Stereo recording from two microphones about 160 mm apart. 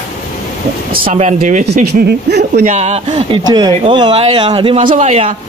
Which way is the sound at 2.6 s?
45° right (ahead or behind).